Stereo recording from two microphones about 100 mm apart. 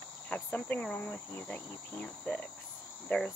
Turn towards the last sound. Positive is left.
turn(degrees=15)  # may be behind; listen again after turning